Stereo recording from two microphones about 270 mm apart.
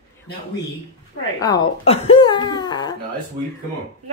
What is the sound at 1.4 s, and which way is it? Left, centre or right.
Female singing, centre.